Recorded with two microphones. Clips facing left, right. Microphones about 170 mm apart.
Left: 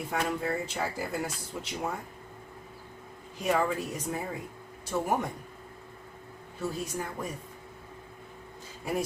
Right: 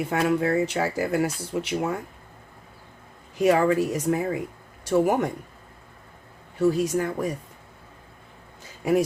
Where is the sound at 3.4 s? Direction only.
85° right.